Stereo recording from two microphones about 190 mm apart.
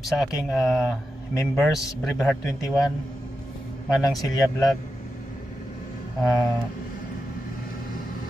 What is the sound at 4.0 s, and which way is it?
Speech, 20° left (ahead or behind).